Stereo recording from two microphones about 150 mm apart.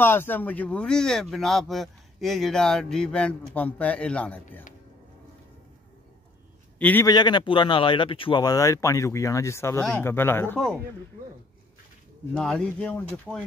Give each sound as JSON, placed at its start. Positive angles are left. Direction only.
{"t": 0.0, "sound": "speech", "side_deg": 15}
{"t": 6.8, "sound": "a man's voice", "side_deg": 10}
{"t": 7.1, "sound": "speech", "side_deg": 30}
{"t": 12.4, "sound": "speech", "side_deg": 5}